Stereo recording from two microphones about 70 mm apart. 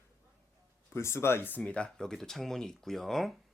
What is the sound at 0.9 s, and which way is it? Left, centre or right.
Speech, left.